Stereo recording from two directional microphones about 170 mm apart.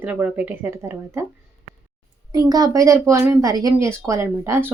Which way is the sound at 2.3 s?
20° right (ahead or behind).